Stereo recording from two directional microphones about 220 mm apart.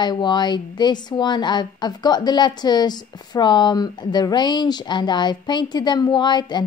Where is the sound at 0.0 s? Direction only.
20° left (ahead or behind).